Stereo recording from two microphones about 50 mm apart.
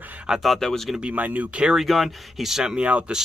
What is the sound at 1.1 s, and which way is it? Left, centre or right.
Speech, right.